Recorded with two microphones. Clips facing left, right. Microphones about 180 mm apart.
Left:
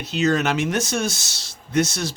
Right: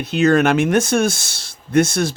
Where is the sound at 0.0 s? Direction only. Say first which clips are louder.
Right 6 dB; 55° right (ahead or behind).